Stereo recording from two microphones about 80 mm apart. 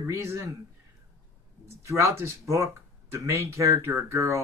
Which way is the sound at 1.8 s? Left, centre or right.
Right.